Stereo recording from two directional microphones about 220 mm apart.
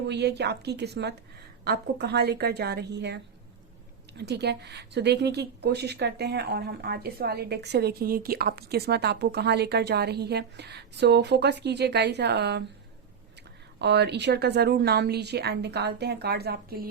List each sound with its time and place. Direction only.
0.1 s a woman's voice: 50° right (ahead or behind)
4.2 s a woman's voice: 50° right (ahead or behind)
13.7 s a woman's voice: 50° right (ahead or behind)